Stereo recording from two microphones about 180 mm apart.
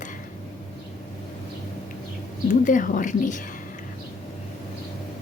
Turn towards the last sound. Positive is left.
turn(degrees=45)  # may be behind; listen again after turning